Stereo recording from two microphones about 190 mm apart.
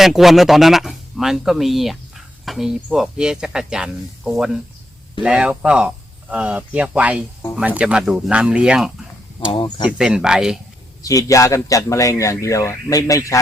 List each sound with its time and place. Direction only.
0.0 s speech: centre (ahead or behind)
9.5 s speech: 25° left (ahead or behind)
10.0 s speech: 5° right (ahead or behind)
11.0 s speech: 20° left (ahead or behind)